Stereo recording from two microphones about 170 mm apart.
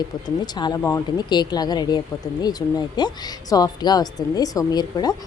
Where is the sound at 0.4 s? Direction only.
25° left (ahead or behind).